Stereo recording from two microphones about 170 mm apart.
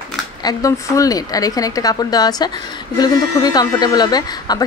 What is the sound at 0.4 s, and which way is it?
Speech, 20° left (ahead or behind).